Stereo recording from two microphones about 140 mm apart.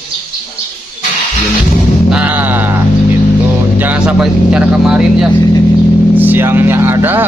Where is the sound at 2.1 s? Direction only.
10° right (ahead or behind).